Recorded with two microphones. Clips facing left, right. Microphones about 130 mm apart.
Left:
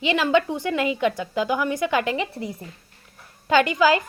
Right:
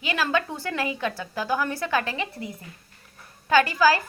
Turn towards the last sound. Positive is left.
turn(degrees=20)  # may be behind; listen again after turning